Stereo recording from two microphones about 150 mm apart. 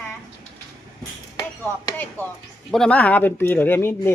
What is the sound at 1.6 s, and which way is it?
Speech, 10° left (ahead or behind).